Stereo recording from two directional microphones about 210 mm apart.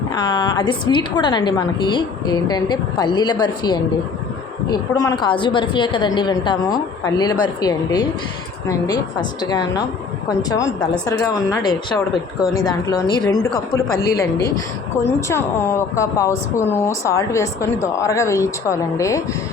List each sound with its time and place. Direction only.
0.1 s a woman's voice: 20° left (ahead or behind)